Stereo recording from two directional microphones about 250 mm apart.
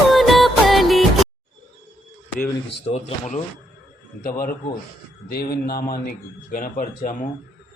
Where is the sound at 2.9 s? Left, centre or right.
Left.